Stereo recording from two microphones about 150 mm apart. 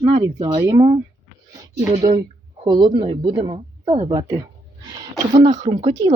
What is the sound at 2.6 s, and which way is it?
A woman's voice, 30° right (ahead or behind).